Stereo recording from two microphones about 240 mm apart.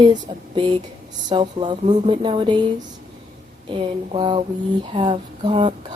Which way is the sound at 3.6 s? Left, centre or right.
Centre.